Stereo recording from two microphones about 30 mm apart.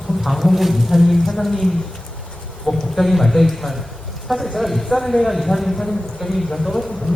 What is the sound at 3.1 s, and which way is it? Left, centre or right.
A man's voice, centre.